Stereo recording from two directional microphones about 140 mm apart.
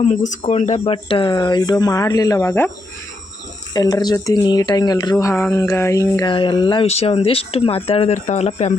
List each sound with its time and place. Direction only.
0.0 s speech: 60° left (ahead or behind)
1.0 s speech: 35° left (ahead or behind)
3.8 s speech: 30° left (ahead or behind)
6.2 s speech: 35° left (ahead or behind)
6.8 s speech: 45° left (ahead or behind)